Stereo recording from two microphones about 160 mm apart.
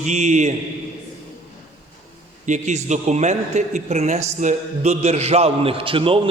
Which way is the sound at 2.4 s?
50° right (ahead or behind).